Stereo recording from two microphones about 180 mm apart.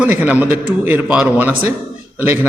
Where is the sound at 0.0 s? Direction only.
10° right (ahead or behind).